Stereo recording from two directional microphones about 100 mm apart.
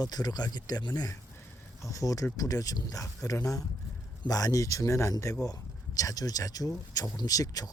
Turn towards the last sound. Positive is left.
turn(degrees=40)  # may be behind; listen again after turning